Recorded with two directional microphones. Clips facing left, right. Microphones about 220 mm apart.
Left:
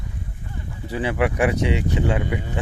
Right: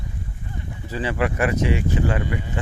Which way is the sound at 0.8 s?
15° left (ahead or behind).